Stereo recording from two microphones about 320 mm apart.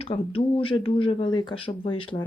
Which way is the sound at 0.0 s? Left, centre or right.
Centre.